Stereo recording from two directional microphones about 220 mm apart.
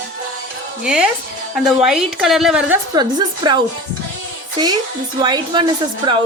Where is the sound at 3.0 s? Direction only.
20° right (ahead or behind).